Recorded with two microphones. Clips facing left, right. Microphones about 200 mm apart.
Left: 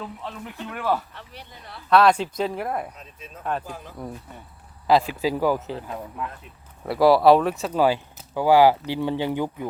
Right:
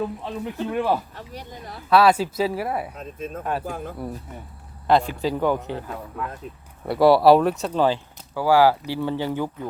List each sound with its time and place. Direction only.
0.0 s speech: 15° right (ahead or behind)
1.1 s speech: 40° right (ahead or behind)
1.9 s speech: 5° right (ahead or behind)
2.9 s speech: 50° right (ahead or behind)
4.9 s speech: 5° left (ahead or behind)
6.5 s speech: 40° right (ahead or behind)
6.8 s speech: centre (ahead or behind)
7.6 s speech: 10° left (ahead or behind)